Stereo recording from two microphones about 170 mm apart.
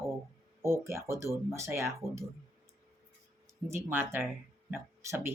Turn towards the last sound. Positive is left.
turn(degrees=-15)  # may be behind; listen again after turning